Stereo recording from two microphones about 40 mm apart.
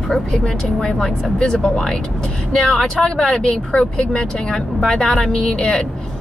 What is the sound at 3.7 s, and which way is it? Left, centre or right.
Speech, left.